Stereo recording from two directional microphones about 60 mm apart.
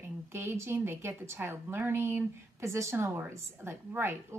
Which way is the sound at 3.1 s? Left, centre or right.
Right.